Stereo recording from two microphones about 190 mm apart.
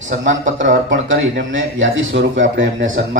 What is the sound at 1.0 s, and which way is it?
Speech, 85° right.